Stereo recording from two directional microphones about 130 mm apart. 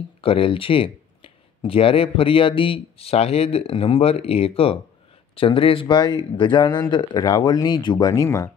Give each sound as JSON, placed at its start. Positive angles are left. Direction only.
{"t": 0.2, "sound": "a man's voice", "side_deg": 45}